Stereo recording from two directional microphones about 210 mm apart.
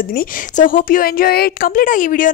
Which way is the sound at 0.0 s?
45° left (ahead or behind).